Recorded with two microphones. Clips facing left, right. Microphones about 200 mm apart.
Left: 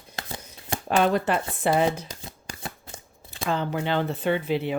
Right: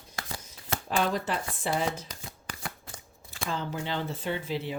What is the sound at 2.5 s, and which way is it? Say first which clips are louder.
Shuffling cards: left 2 dB; 25° left (ahead or behind).